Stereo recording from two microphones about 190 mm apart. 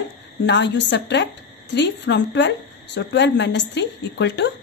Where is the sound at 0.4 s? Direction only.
65° left (ahead or behind).